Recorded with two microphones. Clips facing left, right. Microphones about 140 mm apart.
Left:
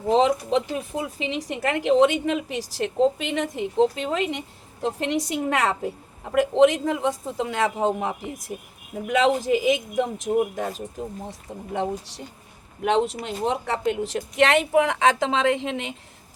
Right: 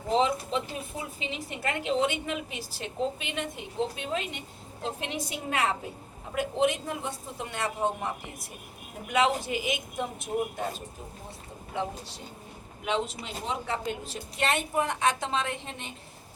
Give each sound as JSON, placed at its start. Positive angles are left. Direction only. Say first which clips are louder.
{"t": 0.1, "sound": "speech", "louder": "left 7 dB", "side_deg": 80}
{"t": 11.3, "sound": "speech", "louder": "left 8 dB", "side_deg": 75}
{"t": 12.8, "sound": "speech", "louder": "left 8 dB", "side_deg": 60}